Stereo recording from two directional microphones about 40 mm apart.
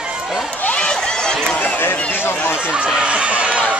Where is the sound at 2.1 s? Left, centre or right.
Left.